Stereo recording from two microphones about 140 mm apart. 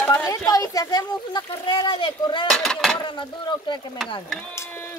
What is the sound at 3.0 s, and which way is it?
Speech, 35° left (ahead or behind).